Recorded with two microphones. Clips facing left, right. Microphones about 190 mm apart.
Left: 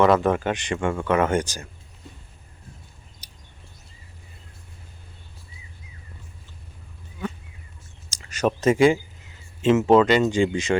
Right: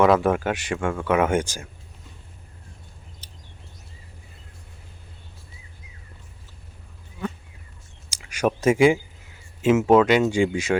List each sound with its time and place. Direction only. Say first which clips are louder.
0.0 s speech: even; 5° right (ahead or behind)
3.2 s a sound: right 4 dB; 15° left (ahead or behind)
8.1 s speech: even; 10° right (ahead or behind)